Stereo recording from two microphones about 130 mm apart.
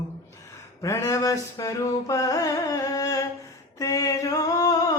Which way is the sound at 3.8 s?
25° left (ahead or behind).